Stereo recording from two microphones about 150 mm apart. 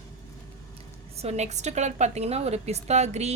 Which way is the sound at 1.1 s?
45° right (ahead or behind).